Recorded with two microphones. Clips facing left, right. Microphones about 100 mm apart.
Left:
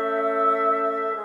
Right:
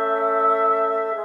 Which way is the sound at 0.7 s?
40° right (ahead or behind).